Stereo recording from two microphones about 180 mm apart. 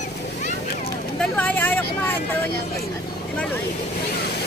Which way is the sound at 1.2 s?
10° left (ahead or behind).